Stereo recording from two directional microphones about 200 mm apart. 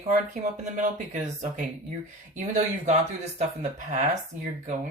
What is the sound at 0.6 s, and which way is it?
Speech, 40° right (ahead or behind).